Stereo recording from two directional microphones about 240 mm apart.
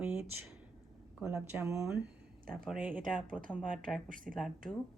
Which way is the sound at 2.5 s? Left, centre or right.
Centre.